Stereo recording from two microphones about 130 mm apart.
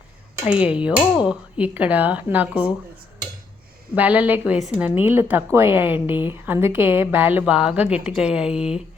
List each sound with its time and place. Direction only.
0.4 s a woman's voice: 10° right (ahead or behind)
3.9 s a woman's voice: 10° right (ahead or behind)